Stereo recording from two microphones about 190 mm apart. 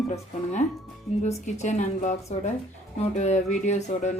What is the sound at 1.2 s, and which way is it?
Speech, 40° left (ahead or behind).